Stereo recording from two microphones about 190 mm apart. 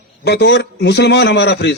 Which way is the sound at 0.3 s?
60° left (ahead or behind).